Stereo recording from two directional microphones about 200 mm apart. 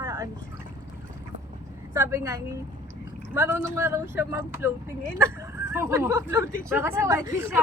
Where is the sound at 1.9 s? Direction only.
15° right (ahead or behind).